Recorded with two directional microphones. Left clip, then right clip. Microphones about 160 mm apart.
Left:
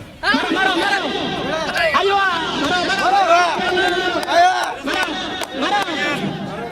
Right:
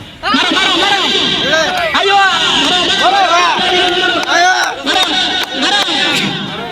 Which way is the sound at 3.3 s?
55° left (ahead or behind).